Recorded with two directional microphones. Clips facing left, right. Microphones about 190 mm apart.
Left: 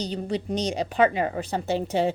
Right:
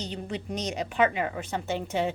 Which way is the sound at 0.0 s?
35° left (ahead or behind).